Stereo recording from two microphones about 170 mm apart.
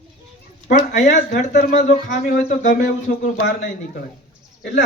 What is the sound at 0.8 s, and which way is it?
Speech, 45° left (ahead or behind).